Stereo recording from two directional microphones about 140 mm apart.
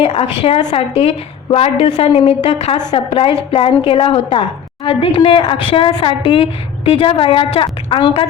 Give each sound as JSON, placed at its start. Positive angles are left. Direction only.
{"t": 0.4, "sound": "a woman's voice", "side_deg": 45}